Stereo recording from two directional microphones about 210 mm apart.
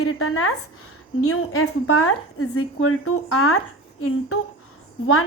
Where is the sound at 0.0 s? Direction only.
85° left.